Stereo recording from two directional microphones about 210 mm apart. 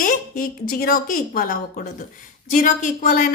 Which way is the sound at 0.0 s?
45° left (ahead or behind).